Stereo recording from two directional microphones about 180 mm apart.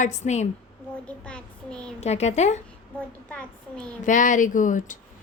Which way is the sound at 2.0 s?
35° left (ahead or behind).